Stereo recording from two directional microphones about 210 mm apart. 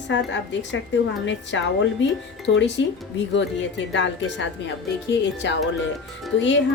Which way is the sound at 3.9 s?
60° left (ahead or behind).